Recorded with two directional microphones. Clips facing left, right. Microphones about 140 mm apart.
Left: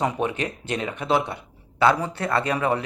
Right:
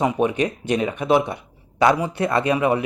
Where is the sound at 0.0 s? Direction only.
15° right (ahead or behind).